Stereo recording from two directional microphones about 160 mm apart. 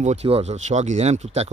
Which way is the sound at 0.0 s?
45° right (ahead or behind).